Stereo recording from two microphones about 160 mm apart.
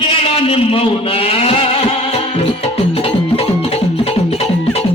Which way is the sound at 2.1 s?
40° left (ahead or behind).